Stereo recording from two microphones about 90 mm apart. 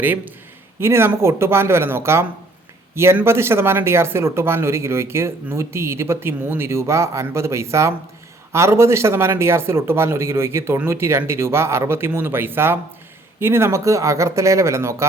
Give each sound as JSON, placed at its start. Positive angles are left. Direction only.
{"t": 0.0, "sound": "speech", "side_deg": -20}